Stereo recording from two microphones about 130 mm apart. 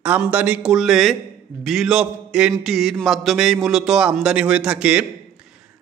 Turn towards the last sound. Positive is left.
turn(degrees=-10)  # may be behind; listen again after turning